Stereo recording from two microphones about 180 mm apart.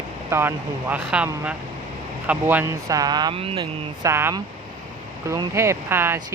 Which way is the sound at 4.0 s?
15° right (ahead or behind).